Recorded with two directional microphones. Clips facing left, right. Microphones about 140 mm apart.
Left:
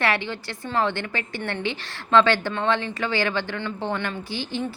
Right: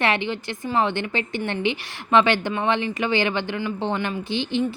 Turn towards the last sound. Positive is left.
turn(degrees=-20)  # may be behind; listen again after turning